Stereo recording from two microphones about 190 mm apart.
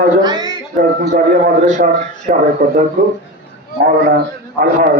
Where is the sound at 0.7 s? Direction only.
50° right (ahead or behind).